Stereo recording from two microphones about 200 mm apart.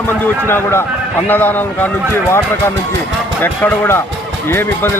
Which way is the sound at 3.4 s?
10° left (ahead or behind).